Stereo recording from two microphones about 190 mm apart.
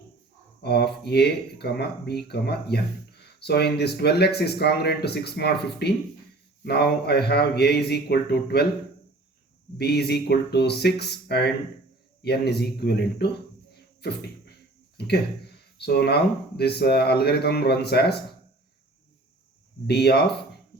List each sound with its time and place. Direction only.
0.6 s speech: 60° left (ahead or behind)
9.7 s speech: 55° left (ahead or behind)
14.9 s speech: 60° left (ahead or behind)
19.9 s speech: 60° left (ahead or behind)